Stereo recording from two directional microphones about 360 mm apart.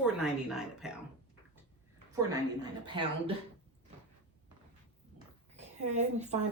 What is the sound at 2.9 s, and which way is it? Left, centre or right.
Speech, centre.